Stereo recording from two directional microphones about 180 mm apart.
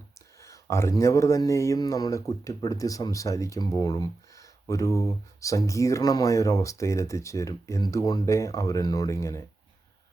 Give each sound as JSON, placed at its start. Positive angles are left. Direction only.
{"t": 0.3, "sound": "speech", "side_deg": 15}